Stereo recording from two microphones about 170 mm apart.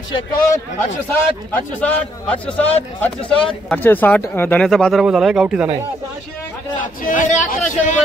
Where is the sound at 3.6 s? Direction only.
10° left (ahead or behind); by 5.7 s 5° right (ahead or behind).